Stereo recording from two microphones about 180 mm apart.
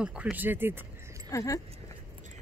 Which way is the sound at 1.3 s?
15° left (ahead or behind).